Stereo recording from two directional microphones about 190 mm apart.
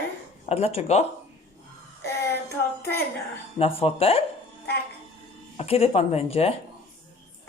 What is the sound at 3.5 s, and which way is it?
Speech, 30° left (ahead or behind).